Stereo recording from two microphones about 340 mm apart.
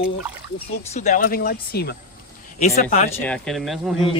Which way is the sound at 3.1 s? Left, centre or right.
Centre.